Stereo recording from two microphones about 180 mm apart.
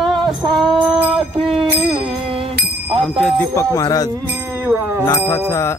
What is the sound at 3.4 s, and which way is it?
Music, 15° left (ahead or behind).